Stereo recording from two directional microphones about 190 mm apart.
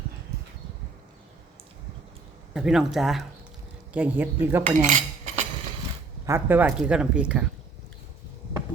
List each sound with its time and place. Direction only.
2.5 s speech: 5° right (ahead or behind)
4.6 s cutlery: 40° right (ahead or behind)
6.2 s speech: 10° right (ahead or behind)